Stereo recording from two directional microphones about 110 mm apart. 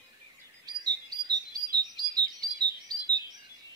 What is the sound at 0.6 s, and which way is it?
Chirp, 40° right (ahead or behind).